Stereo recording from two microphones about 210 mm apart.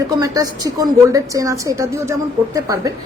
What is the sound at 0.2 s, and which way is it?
A woman's voice, 15° right (ahead or behind).